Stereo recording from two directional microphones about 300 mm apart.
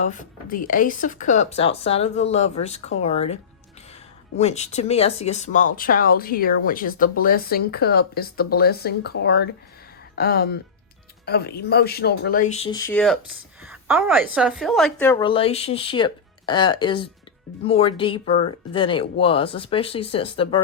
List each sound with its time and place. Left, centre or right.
0.0 s speech: left
4.4 s speech: left